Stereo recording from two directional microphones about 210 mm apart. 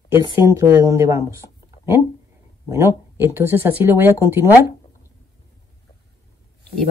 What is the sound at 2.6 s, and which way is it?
Speech, 15° right (ahead or behind).